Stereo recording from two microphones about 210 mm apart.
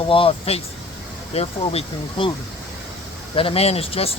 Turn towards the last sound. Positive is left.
turn(degrees=25)  # may be behind; listen again after turning